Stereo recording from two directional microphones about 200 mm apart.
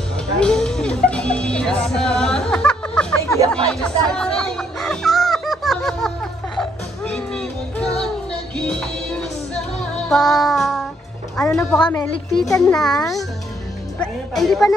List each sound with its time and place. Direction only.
0.4 s music: 5° left (ahead or behind)
11.4 s a woman's voice: 5° left (ahead or behind)
12.6 s speech: 5° left (ahead or behind)